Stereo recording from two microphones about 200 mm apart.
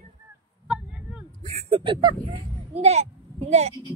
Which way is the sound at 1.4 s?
35° right (ahead or behind).